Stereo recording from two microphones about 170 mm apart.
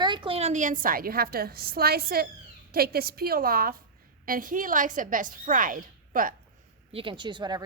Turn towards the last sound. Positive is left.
turn(degrees=-25)  # may be behind; listen again after turning